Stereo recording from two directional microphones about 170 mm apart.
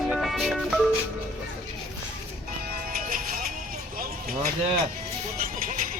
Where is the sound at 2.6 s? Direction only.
60° right (ahead or behind).